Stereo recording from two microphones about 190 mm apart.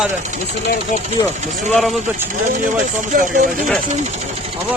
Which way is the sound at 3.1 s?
45° right (ahead or behind).